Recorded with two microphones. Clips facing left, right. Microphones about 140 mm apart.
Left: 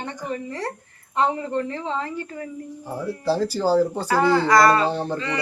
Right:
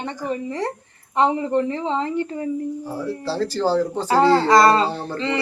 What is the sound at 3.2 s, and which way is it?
Speech, 15° left (ahead or behind).